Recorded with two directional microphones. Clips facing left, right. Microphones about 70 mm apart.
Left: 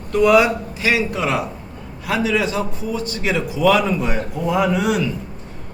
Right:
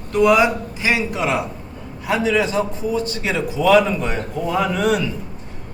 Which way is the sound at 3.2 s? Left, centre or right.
Centre.